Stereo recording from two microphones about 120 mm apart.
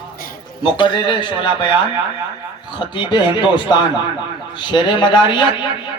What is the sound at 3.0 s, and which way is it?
A man's voice, 40° left (ahead or behind).